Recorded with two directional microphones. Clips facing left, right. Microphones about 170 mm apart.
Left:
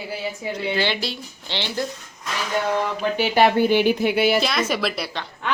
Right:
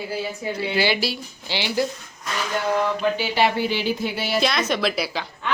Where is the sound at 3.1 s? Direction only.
50° left (ahead or behind).